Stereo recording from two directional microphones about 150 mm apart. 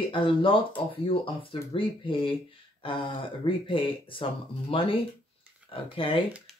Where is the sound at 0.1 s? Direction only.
35° left (ahead or behind).